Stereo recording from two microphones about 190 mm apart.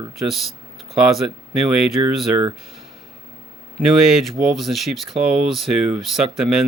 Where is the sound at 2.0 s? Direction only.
25° right (ahead or behind).